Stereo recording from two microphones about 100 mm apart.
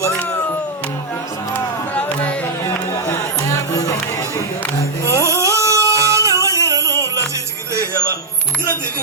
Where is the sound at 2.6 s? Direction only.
30° left (ahead or behind).